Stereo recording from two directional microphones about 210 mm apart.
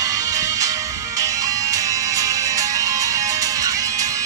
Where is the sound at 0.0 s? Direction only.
15° right (ahead or behind).